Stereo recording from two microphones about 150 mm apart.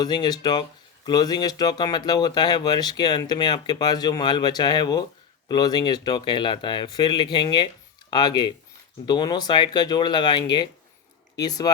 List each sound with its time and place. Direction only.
0.0 s speech: 30° left (ahead or behind)